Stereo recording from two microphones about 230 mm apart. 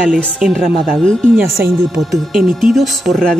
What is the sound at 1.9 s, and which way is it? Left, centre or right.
Speech, centre.